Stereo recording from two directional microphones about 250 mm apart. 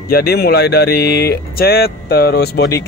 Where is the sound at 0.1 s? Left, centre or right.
Left.